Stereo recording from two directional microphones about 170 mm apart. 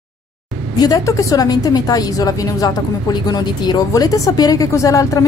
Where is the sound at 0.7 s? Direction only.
20° left (ahead or behind).